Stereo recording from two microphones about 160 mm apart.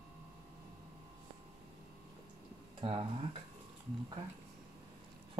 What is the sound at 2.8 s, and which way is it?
Speech, 35° right (ahead or behind).